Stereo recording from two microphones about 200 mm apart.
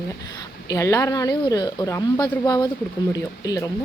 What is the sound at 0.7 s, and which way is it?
Speech, 15° left (ahead or behind).